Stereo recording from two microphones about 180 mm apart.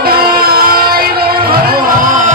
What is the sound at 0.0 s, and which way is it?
Music, 55° right (ahead or behind).